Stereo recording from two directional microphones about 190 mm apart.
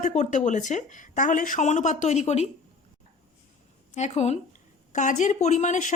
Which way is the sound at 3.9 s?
35° left (ahead or behind).